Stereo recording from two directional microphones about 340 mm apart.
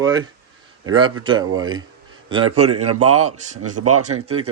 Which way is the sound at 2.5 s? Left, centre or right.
Right.